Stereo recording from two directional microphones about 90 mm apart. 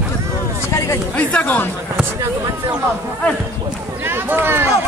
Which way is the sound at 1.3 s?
15° left (ahead or behind).